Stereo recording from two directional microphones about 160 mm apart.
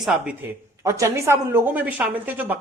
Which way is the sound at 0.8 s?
20° right (ahead or behind).